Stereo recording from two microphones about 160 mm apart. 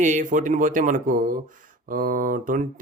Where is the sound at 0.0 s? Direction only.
55° right (ahead or behind).